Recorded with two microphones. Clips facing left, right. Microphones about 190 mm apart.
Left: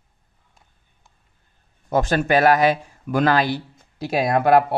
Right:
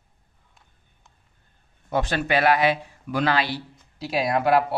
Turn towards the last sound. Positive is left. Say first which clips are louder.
# left 4 dB
turn(degrees=50)  # may be behind; listen again after turning